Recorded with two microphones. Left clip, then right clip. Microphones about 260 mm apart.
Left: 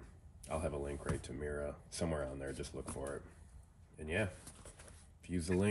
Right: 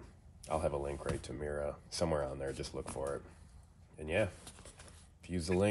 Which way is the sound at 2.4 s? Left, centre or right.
Centre.